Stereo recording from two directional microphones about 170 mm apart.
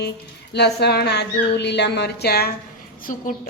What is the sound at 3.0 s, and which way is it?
Speech, 50° left (ahead or behind).